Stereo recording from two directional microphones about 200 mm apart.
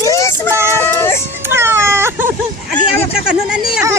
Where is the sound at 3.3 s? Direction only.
5° right (ahead or behind).